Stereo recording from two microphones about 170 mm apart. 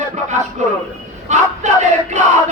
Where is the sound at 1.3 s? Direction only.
45° right (ahead or behind).